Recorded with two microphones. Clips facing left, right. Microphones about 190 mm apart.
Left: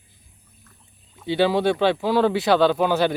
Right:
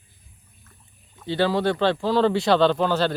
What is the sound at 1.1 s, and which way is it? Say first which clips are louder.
Speech: left 2 dB; 10° left (ahead or behind).